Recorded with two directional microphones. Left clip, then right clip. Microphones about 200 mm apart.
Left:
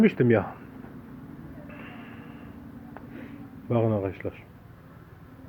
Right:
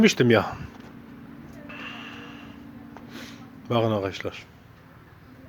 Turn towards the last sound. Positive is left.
turn(degrees=-20)  # may be behind; listen again after turning